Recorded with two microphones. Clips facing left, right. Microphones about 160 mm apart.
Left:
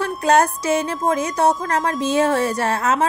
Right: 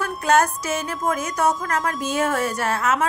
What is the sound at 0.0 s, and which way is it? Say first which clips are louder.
A woman's voice: left 3 dB; 30° left (ahead or behind).